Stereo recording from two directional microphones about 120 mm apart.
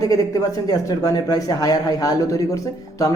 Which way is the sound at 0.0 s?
30° left (ahead or behind).